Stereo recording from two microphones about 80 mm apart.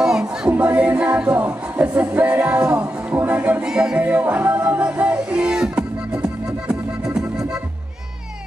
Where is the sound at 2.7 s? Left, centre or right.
Centre.